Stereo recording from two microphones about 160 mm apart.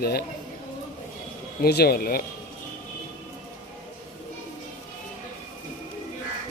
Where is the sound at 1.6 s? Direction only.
80° left.